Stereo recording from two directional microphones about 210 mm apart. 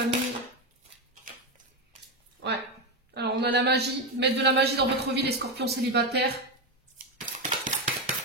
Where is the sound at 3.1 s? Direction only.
50° right (ahead or behind).